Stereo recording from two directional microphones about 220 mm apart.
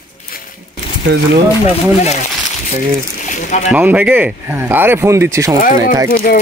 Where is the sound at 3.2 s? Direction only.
35° left (ahead or behind).